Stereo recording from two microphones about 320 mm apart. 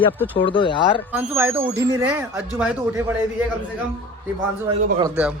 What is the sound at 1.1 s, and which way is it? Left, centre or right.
A man's voice, centre.